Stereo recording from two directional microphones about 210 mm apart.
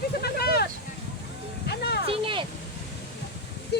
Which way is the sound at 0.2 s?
50° left (ahead or behind).